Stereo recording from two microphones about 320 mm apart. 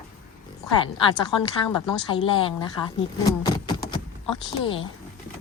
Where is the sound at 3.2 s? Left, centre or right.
Centre.